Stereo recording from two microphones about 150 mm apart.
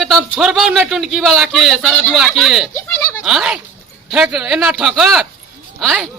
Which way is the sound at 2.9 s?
20° left (ahead or behind).